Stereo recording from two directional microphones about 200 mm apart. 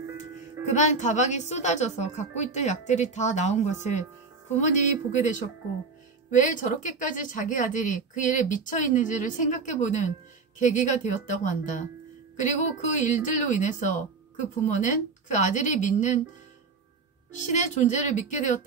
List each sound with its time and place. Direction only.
0.7 s speech: 35° left (ahead or behind)
6.3 s speech: 40° left (ahead or behind)
17.5 s speech: 35° left (ahead or behind)